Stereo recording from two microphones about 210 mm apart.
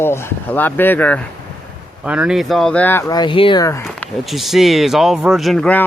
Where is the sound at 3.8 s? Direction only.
Centre (ahead or behind).